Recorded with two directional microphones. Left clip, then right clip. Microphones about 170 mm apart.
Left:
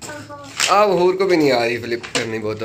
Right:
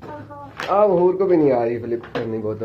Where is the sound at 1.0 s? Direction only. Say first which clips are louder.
Left 1 dB; 15° left (ahead or behind).